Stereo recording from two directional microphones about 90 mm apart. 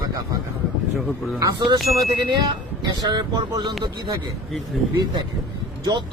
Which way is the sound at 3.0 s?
55° right (ahead or behind).